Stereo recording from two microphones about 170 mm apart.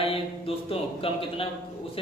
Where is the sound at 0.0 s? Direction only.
35° left (ahead or behind).